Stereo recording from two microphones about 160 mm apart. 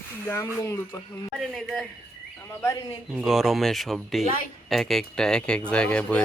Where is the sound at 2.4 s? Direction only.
15° left (ahead or behind).